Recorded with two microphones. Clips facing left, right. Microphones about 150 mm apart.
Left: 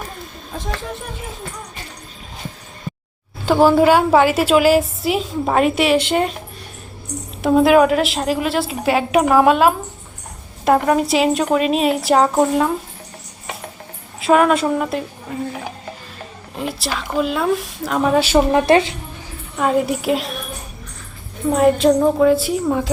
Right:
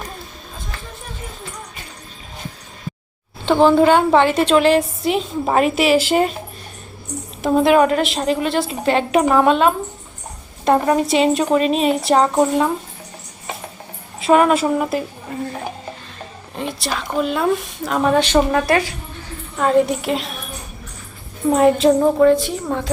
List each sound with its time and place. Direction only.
3.4 s a woman's voice: 5° left (ahead or behind)
7.4 s a woman's voice: centre (ahead or behind)
14.2 s a woman's voice: centre (ahead or behind)
18.5 s speech: 25° left (ahead or behind)
19.5 s a woman's voice: 5° left (ahead or behind)
21.5 s a woman's voice: centre (ahead or behind)